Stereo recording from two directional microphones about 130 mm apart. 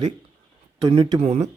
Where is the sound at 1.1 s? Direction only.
60° right (ahead or behind).